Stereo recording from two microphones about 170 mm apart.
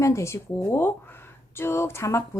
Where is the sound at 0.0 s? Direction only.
15° left (ahead or behind).